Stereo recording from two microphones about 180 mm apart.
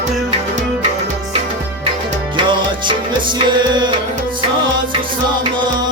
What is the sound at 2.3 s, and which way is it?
Music, 25° right (ahead or behind).